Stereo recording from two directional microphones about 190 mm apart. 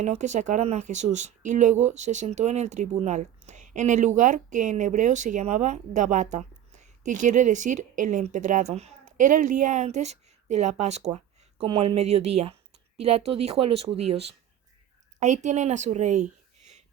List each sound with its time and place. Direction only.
0.0 s a woman's voice: 35° right (ahead or behind)